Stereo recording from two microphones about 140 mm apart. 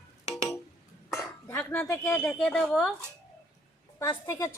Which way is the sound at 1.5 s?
20° left (ahead or behind).